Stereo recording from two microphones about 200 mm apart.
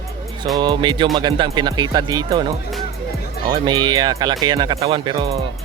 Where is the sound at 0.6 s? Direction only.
25° right (ahead or behind).